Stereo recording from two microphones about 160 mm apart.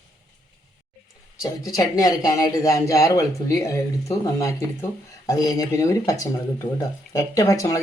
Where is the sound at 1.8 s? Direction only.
20° left (ahead or behind).